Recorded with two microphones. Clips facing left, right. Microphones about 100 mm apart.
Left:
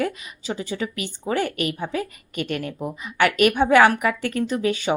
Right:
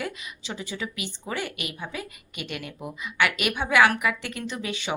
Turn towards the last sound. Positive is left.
turn(degrees=40)  # may be behind; listen again after turning